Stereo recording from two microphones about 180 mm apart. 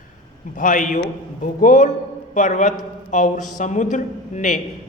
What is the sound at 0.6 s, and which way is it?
Speech, 45° left (ahead or behind).